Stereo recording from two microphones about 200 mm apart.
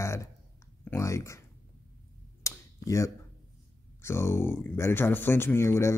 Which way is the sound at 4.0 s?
15° left (ahead or behind).